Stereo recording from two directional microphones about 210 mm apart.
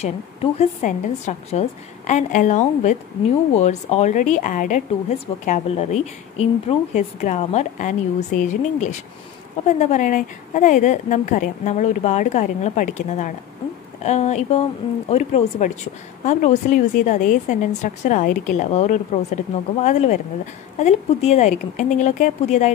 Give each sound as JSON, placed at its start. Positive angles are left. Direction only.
{"t": 0.0, "sound": "speech", "side_deg": 30}